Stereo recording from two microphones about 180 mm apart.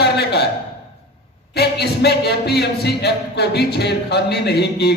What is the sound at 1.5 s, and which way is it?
A man's voice, 65° left (ahead or behind).